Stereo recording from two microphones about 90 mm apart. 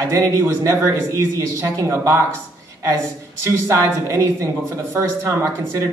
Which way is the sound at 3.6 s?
35° right (ahead or behind).